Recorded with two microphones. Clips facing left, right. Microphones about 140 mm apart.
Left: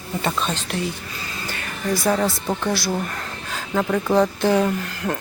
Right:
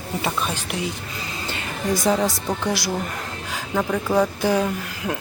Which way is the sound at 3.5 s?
5° right (ahead or behind).